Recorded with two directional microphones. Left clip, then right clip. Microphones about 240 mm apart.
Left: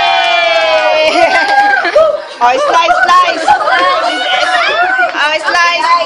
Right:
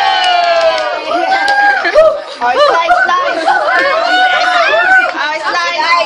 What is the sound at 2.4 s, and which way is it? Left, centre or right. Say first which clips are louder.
Chatter: left 1 dB; left.